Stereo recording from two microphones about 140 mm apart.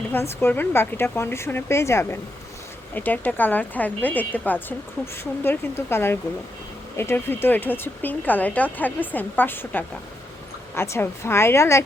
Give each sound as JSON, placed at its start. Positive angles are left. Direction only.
{"t": 0.1, "sound": "a woman's voice", "side_deg": 15}